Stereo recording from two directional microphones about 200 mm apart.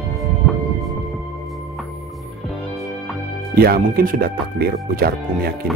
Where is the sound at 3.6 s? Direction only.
50° right (ahead or behind).